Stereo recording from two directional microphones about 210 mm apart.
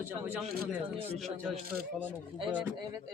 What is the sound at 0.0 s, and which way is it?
Speech, 5° right (ahead or behind).